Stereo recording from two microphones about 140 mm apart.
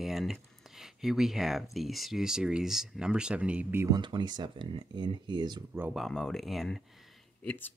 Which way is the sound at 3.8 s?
30° right (ahead or behind).